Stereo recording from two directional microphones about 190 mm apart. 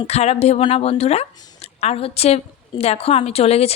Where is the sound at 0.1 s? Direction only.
35° left (ahead or behind).